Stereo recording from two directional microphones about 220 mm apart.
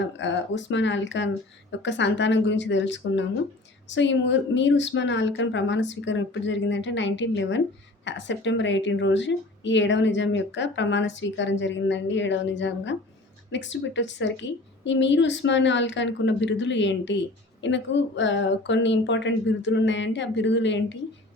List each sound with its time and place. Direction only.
0.0 s a woman's voice: 55° left (ahead or behind)